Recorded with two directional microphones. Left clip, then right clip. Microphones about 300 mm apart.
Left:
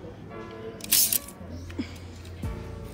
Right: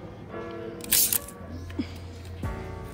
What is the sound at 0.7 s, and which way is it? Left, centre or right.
Music, right.